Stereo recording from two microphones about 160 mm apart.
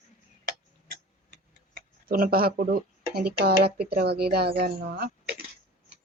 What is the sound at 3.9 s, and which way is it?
Speech, 80° right.